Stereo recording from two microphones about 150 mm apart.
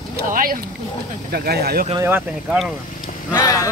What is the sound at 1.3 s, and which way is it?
Speech, 90° right.